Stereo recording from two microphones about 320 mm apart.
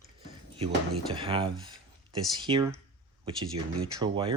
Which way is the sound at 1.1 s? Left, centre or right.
Centre.